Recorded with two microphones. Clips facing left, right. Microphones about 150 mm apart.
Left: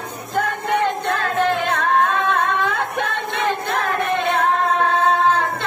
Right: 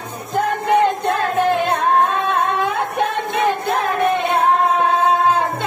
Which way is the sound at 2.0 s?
25° right (ahead or behind).